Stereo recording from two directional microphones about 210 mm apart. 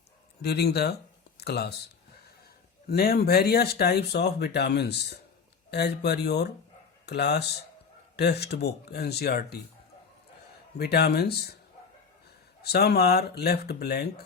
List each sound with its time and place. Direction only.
0.4 s speech: 50° left (ahead or behind)
2.8 s speech: 45° left (ahead or behind)
10.8 s speech: 50° left (ahead or behind)
12.6 s speech: 50° left (ahead or behind)